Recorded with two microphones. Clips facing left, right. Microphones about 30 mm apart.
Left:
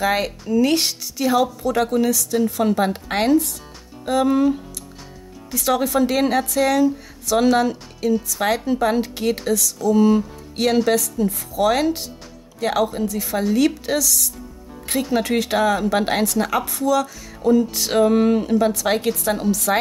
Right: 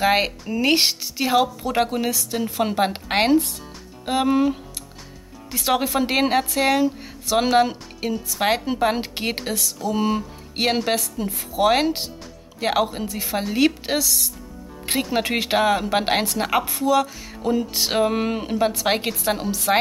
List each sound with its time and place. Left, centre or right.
0.0 s a woman's voice: right